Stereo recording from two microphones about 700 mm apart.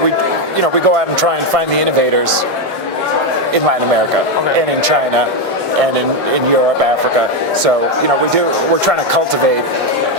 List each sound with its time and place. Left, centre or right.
0.9 s speech: right